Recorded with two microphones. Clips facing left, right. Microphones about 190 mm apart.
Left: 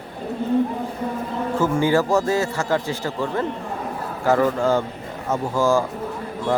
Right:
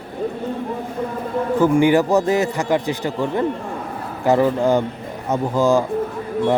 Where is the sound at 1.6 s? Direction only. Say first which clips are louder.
Right 4 dB; 15° right (ahead or behind).